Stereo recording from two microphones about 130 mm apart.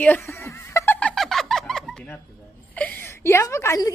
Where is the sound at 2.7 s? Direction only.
15° left (ahead or behind).